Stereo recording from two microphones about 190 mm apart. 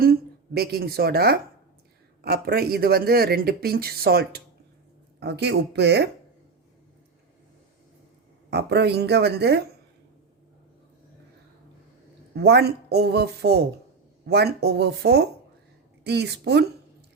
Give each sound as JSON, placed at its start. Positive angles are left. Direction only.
{"t": 0.0, "sound": "speech", "side_deg": -55}
{"t": 8.4, "sound": "speech", "side_deg": -60}
{"t": 12.3, "sound": "speech", "side_deg": -60}